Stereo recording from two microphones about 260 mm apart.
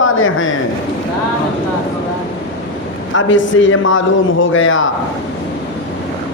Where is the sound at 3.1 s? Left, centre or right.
Left.